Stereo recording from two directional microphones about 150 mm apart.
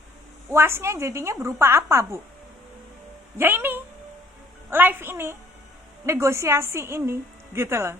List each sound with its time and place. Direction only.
0.5 s a woman's voice: 15° right (ahead or behind)
3.3 s a woman's voice: 15° right (ahead or behind)